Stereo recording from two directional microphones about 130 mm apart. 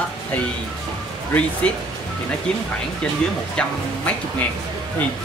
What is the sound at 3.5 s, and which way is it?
Speech, 10° left (ahead or behind).